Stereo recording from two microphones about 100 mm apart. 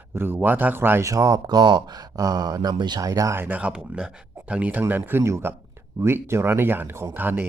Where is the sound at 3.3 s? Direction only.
20° right (ahead or behind).